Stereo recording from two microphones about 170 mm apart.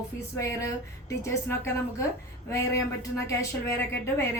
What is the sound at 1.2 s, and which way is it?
A woman's voice, 15° left (ahead or behind).